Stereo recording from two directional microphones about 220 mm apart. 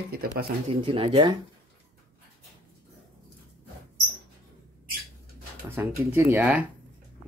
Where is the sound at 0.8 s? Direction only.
25° right (ahead or behind).